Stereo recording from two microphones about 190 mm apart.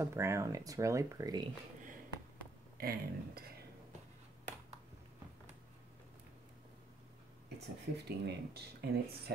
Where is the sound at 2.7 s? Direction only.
50° right (ahead or behind).